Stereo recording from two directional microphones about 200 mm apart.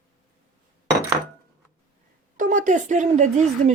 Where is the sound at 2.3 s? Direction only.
40° right (ahead or behind).